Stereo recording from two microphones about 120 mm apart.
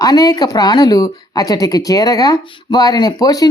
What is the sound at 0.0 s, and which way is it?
Speech, 30° left (ahead or behind).